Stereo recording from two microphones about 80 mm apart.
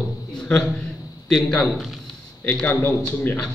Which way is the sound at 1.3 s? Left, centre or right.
Centre.